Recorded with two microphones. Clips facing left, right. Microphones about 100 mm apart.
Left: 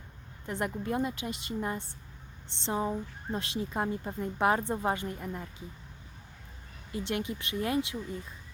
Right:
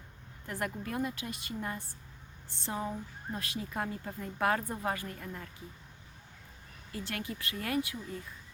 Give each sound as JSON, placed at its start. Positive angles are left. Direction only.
{"t": 0.4, "sound": "a woman's voice", "side_deg": 20}
{"t": 6.9, "sound": "a woman's voice", "side_deg": 20}